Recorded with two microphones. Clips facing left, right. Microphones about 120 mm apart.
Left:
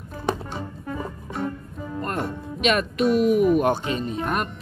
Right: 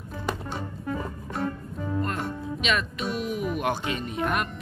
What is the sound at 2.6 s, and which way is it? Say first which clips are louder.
Speech: left 6 dB; 50° left (ahead or behind).